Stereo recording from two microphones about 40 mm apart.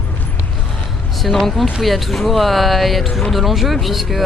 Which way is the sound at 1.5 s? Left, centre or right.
Centre.